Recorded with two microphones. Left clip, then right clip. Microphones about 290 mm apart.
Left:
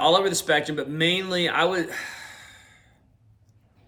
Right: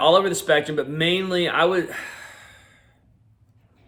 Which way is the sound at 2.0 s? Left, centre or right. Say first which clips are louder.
Even; centre.